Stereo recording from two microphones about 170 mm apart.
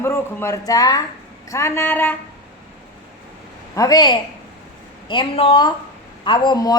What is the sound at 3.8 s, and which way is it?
A woman's voice, 25° left (ahead or behind).